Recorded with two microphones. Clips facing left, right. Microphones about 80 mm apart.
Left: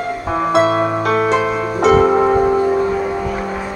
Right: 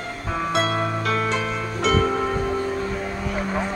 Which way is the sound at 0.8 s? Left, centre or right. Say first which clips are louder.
Left 8 dB; left.